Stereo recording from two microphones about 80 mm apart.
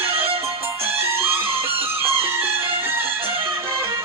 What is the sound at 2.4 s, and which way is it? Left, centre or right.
Music, right.